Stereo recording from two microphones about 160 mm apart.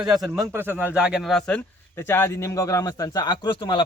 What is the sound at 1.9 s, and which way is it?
Speech, 15° left (ahead or behind).